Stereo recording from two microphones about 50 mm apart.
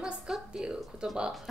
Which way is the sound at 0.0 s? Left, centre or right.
Centre.